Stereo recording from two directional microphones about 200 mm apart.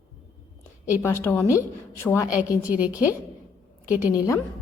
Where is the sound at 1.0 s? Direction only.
15° left (ahead or behind).